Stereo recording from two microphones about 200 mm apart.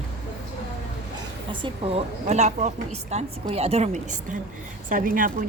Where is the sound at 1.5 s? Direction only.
25° right (ahead or behind).